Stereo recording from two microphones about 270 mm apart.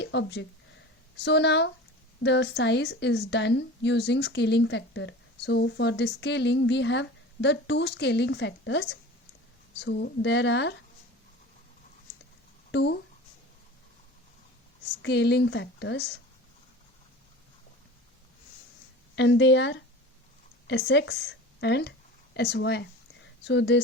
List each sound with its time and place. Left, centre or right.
0.0 s a sound: left
2.2 s a woman's voice: left
12.7 s a woman's voice: left
15.0 s a woman's voice: left
19.1 s a woman's voice: left